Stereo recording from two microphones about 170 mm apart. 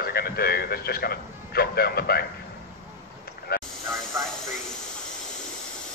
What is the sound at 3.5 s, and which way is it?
Vehicle, 60° left (ahead or behind).